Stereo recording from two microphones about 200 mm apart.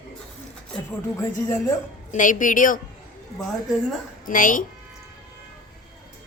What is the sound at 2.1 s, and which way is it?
Speech, 40° left (ahead or behind).